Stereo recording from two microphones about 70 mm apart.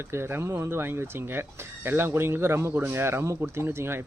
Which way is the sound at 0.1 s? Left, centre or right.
Right.